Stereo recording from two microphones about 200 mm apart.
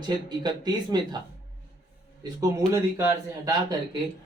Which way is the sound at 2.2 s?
15° right (ahead or behind).